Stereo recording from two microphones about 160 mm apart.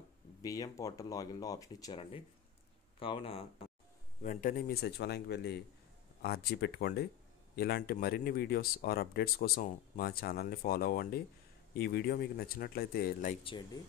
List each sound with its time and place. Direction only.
0.4 s speech: 20° left (ahead or behind)
2.0 s speech: 35° left (ahead or behind)
4.2 s a man's voice: 55° left (ahead or behind); by 5.6 s 90° left
6.2 s speech: 75° left (ahead or behind)
13.4 s speech: 35° left (ahead or behind)